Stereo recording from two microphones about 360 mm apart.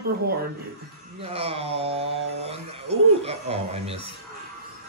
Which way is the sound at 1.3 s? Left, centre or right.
Centre.